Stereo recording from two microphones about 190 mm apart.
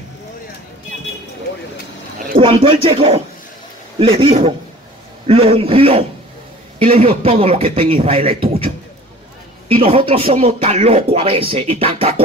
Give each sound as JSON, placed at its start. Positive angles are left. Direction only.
{"t": 2.3, "sound": "speech", "side_deg": -25}
{"t": 9.8, "sound": "speech", "side_deg": -30}